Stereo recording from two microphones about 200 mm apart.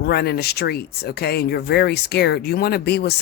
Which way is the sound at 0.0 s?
55° left (ahead or behind).